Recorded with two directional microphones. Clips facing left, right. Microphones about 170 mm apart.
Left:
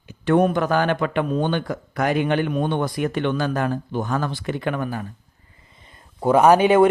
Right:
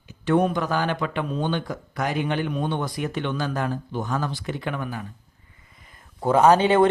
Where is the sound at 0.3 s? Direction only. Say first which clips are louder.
Left 3 dB; 55° left (ahead or behind).